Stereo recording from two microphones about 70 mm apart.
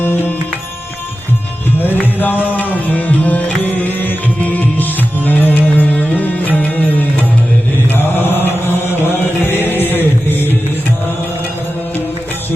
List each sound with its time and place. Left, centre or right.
0.0 s music: left
1.8 s music: left
7.9 s mantra: left
9.0 s music: left